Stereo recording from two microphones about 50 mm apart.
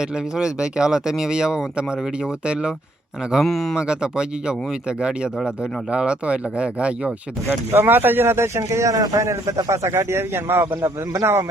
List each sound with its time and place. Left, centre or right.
0.0 s speech: centre
3.4 s speech: centre
3.8 s speech: centre
7.8 s speech: right
8.5 s a man's voice: right
10.0 s a man's voice: right
10.8 s a man's voice: right